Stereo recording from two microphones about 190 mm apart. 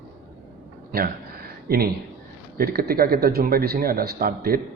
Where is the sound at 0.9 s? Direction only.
50° right (ahead or behind).